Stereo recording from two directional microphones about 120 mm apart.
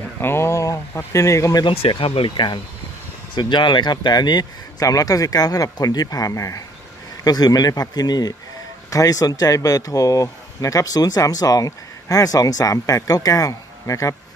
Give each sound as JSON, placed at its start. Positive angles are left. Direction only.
{"t": 0.2, "sound": "speech", "side_deg": 20}
{"t": 1.7, "sound": "speech", "side_deg": 50}